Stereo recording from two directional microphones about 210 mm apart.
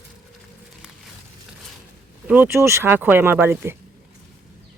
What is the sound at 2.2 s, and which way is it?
A woman's voice, 5° right (ahead or behind).